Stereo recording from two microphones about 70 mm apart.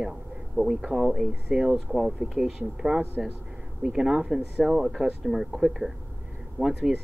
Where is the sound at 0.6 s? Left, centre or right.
Centre.